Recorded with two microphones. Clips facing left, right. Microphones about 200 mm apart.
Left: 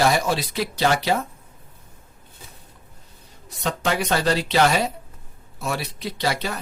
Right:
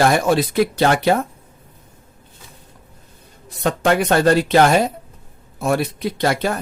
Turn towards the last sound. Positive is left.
turn(degrees=-50)  # may be behind; listen again after turning